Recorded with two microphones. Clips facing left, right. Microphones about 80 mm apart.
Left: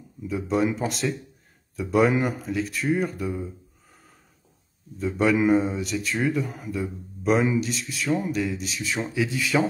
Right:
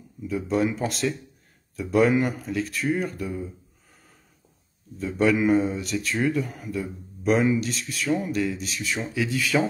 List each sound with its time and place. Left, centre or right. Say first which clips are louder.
0.3 s speech: even; centre
4.9 s speech: even; centre